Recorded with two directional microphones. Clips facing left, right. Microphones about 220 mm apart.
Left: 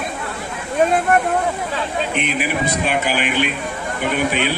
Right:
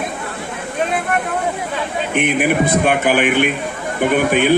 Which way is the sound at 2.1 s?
55° right (ahead or behind).